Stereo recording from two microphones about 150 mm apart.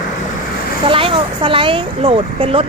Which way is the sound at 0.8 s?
35° right (ahead or behind).